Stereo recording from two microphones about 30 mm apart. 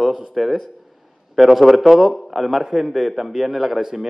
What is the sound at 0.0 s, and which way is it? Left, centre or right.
A man's voice, centre.